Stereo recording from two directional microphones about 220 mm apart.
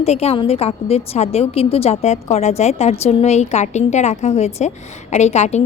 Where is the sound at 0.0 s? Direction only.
30° left (ahead or behind).